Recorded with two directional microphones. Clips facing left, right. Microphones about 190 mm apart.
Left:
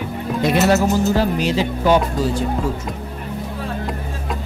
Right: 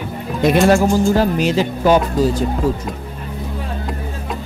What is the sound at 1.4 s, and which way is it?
Speech, 45° right (ahead or behind).